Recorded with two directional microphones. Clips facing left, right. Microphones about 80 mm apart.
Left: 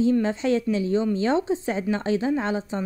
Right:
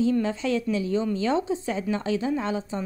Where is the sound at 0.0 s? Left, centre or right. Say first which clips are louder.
Left 2 dB; left.